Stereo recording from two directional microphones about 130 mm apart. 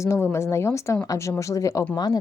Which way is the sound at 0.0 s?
20° left (ahead or behind).